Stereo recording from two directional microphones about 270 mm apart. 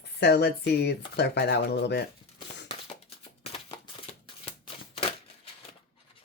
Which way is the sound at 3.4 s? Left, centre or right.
Left.